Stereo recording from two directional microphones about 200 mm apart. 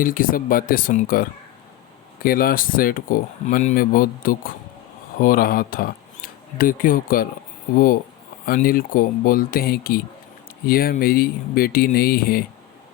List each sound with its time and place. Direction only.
0.0 s speech: 45° left (ahead or behind)
8.4 s speech: 45° left (ahead or behind)